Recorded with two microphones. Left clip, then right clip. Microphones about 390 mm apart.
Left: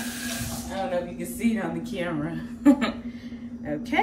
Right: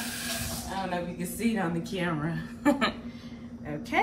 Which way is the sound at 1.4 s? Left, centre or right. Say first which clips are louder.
Left 2 dB; centre.